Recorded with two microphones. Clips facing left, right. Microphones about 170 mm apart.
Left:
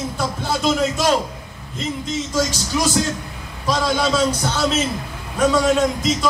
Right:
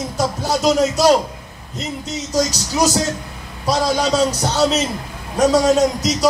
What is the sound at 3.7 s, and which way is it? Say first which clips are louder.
Speech: right 2 dB; 40° right (ahead or behind).